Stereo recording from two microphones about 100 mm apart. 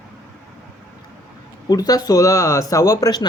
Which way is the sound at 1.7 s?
40° left (ahead or behind).